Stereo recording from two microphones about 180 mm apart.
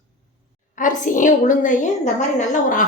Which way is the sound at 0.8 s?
45° left (ahead or behind).